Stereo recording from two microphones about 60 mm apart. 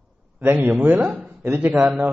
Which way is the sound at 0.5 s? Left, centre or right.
Right.